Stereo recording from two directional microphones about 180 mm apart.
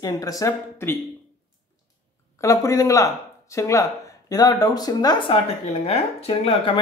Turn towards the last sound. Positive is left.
turn(degrees=30)  # may be behind; listen again after turning